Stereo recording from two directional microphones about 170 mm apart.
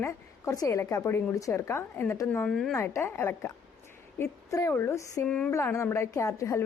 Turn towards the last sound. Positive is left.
turn(degrees=20)  # may be behind; listen again after turning